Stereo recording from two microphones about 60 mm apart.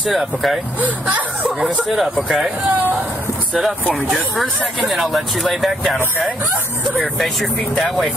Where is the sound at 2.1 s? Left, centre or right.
Centre.